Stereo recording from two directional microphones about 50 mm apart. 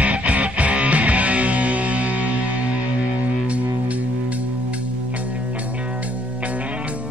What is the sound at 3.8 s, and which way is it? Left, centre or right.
Music, right.